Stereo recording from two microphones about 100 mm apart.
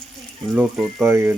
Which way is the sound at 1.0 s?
25° right (ahead or behind).